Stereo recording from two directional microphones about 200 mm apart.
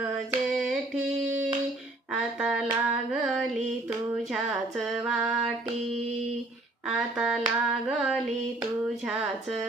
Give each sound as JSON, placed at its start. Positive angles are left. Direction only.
{"t": 0.3, "sound": "a sound", "side_deg": 0}
{"t": 2.4, "sound": "hands", "side_deg": 0}
{"t": 2.8, "sound": "female singing", "side_deg": -5}
{"t": 6.8, "sound": "hands", "side_deg": 0}